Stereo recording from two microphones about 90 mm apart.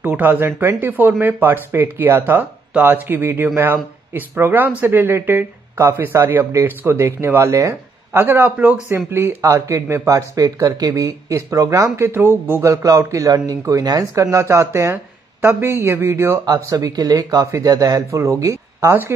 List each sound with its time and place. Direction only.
0.0 s speech: 15° right (ahead or behind); by 11.9 s 40° right (ahead or behind)
12.0 s speech: 25° right (ahead or behind)
12.6 s speech: 35° right (ahead or behind)